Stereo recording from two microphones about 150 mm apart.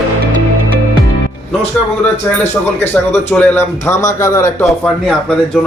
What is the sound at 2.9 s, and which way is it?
Speech, 15° left (ahead or behind).